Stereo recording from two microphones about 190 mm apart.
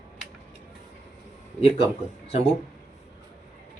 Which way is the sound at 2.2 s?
35° left (ahead or behind).